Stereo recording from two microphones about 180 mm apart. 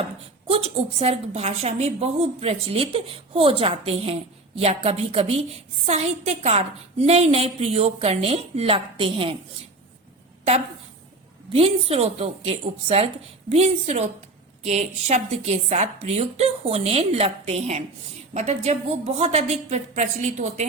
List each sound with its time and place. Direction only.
0.0 s a woman's voice: 30° right (ahead or behind)
11.5 s a woman's voice: 35° right (ahead or behind)